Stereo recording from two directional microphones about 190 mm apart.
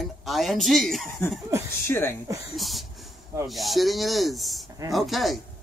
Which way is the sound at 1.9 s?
10° left (ahead or behind).